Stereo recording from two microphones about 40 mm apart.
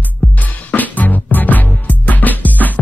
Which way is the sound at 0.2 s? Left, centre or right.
Left.